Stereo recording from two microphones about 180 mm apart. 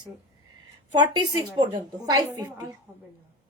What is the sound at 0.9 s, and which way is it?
A woman's voice, 25° right (ahead or behind).